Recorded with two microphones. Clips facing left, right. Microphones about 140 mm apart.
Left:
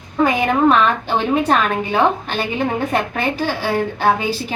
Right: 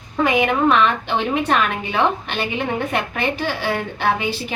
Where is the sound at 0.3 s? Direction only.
40° left (ahead or behind).